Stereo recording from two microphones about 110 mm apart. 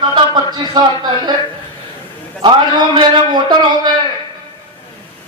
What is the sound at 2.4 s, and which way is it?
A man's voice, 45° right (ahead or behind).